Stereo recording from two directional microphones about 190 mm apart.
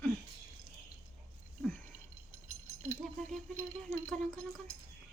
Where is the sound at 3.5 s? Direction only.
15° right (ahead or behind).